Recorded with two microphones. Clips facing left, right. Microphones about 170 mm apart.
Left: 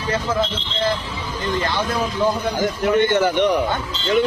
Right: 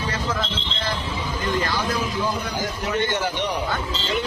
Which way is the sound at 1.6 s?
25° left (ahead or behind).